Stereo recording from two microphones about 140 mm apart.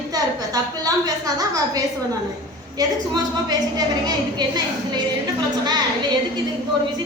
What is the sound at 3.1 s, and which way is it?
Speech, 30° right (ahead or behind).